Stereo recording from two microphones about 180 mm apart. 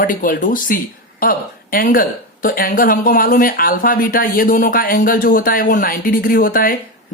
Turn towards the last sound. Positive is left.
turn(degrees=50)  # may be behind; listen again after turning